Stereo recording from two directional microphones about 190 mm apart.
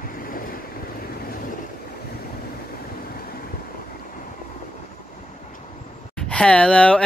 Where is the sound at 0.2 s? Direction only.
50° left (ahead or behind).